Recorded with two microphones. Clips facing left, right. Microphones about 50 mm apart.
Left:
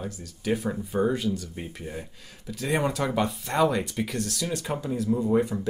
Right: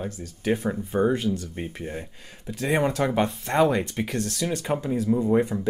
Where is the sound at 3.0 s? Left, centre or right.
Right.